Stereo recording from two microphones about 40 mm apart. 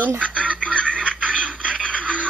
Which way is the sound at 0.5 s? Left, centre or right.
Left.